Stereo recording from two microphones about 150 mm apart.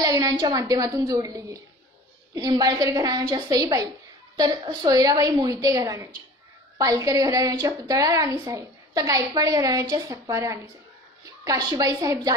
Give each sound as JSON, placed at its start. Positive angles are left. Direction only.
{"t": 0.0, "sound": "a woman's voice", "side_deg": -25}